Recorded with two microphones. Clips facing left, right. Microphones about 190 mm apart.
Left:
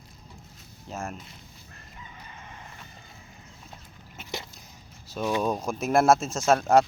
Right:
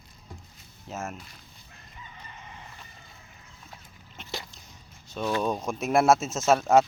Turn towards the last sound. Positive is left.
turn(degrees=0)  # may be behind; listen again after turning